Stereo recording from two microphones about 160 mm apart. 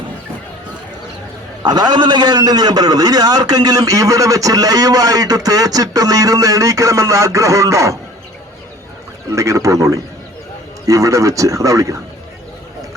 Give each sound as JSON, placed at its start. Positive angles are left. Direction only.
{"t": 1.6, "sound": "a man's voice", "side_deg": -25}
{"t": 9.3, "sound": "a man's voice", "side_deg": -20}